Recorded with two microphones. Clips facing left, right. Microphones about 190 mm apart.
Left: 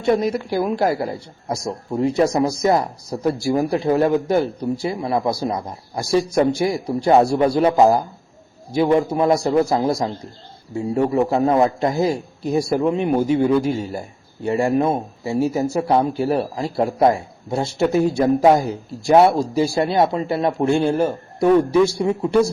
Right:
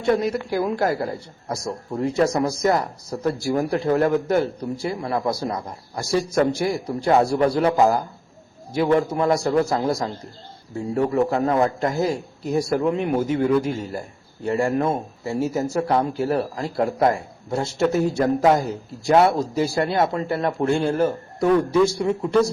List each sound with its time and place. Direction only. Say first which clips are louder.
0.0 s speech: left 2 dB; 15° left (ahead or behind)